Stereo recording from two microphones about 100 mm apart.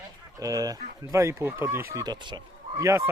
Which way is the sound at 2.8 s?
30° right (ahead or behind).